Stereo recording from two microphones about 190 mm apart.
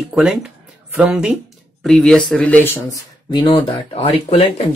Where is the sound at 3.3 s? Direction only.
30° left (ahead or behind).